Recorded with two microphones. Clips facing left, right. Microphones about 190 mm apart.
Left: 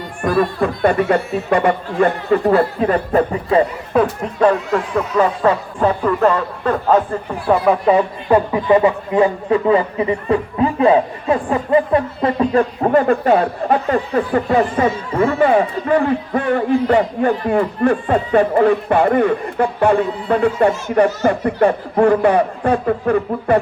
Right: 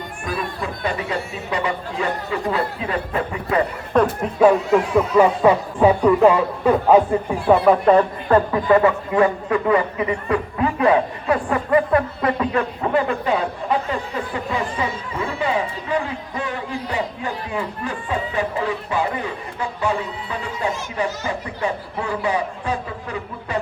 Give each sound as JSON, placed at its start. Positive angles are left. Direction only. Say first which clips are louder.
{"t": 0.2, "sound": "a man's voice", "louder": "left 11 dB", "side_deg": 60}
{"t": 3.5, "sound": "speech", "louder": "left 6 dB", "side_deg": 30}
{"t": 3.9, "sound": "speech", "louder": "left 1 dB", "side_deg": -5}
{"t": 7.4, "sound": "a woman's voice", "louder": "even", "side_deg": 0}
{"t": 9.5, "sound": "a man's voice", "louder": "left 4 dB", "side_deg": 30}